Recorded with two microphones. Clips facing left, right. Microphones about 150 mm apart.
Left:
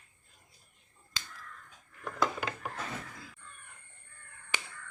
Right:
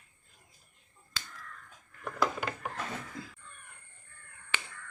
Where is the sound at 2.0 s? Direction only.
5° right (ahead or behind).